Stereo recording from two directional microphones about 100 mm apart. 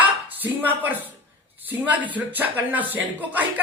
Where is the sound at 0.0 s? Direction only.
15° right (ahead or behind).